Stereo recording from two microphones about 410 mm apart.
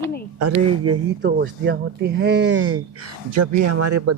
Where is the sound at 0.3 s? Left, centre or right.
Right.